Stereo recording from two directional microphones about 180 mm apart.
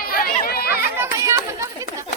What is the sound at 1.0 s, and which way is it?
Chatter, 15° right (ahead or behind).